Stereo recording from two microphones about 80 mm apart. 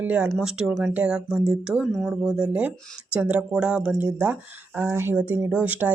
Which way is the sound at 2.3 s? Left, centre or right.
Centre.